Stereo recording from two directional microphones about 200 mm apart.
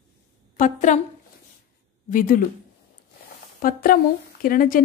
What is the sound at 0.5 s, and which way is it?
Speech, 40° left (ahead or behind).